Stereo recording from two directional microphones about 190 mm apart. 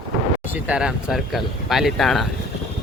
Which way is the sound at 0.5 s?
5° right (ahead or behind).